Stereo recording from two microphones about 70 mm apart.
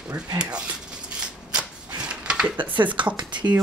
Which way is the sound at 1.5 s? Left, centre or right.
Centre.